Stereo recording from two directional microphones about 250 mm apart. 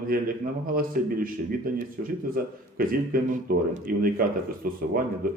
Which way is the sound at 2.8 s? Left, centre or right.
Right.